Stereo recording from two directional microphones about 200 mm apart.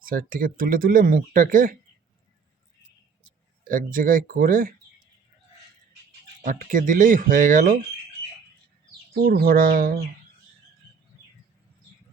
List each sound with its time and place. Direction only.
0.0 s speech: 45° right (ahead or behind)
3.6 s speech: 45° right (ahead or behind)
6.4 s speech: 45° right (ahead or behind)
9.1 s speech: 50° right (ahead or behind)